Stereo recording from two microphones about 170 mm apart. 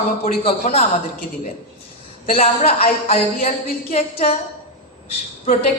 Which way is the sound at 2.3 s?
40° left (ahead or behind).